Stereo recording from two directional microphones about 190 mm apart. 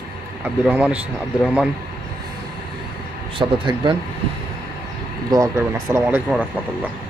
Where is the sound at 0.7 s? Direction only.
5° right (ahead or behind).